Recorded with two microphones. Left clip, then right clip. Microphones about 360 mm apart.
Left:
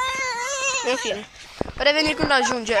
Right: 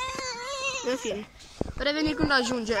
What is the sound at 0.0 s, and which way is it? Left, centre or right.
Baby cry, left.